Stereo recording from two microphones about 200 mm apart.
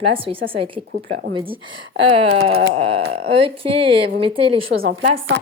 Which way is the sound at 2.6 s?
30° right (ahead or behind).